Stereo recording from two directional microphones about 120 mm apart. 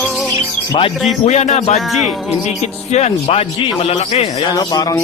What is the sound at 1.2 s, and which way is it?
Speech, 70° left (ahead or behind).